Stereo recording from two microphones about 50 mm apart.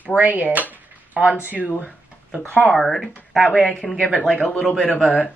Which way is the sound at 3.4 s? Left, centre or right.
Left.